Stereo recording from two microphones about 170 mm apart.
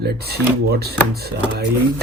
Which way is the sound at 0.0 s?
70° right (ahead or behind).